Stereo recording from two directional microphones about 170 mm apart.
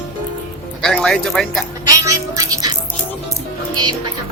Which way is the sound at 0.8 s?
5° left (ahead or behind).